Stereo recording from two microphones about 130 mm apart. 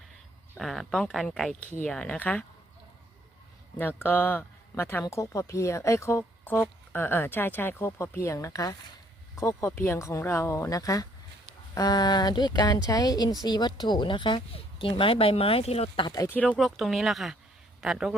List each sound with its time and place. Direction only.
0.5 s speech: centre (ahead or behind)
3.8 s speech: 15° left (ahead or behind); by 16.0 s 50° left (ahead or behind)
16.0 s speech: 30° left (ahead or behind)
16.3 s speech: 10° left (ahead or behind)
16.6 s speech: centre (ahead or behind)